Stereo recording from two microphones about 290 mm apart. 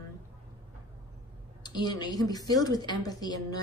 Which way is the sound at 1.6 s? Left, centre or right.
Centre.